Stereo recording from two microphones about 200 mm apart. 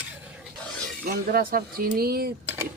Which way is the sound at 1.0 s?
45° right (ahead or behind).